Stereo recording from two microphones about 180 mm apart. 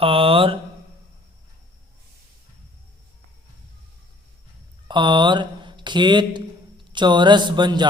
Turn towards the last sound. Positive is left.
turn(degrees=-25)  # may be behind; listen again after turning